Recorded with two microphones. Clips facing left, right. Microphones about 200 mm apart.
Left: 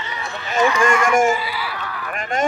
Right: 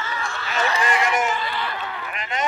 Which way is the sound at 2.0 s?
50° left (ahead or behind).